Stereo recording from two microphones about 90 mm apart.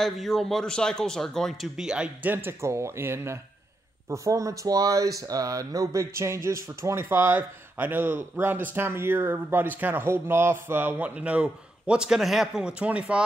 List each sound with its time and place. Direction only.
0.0 s a man's voice: centre (ahead or behind)
1.8 s speech: 10° right (ahead or behind)
2.2 s speech: 25° right (ahead or behind)